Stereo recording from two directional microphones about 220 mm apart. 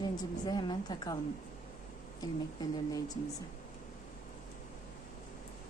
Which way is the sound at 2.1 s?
15° left (ahead or behind).